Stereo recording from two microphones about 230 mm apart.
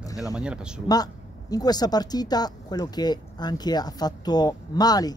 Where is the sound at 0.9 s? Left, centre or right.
Centre.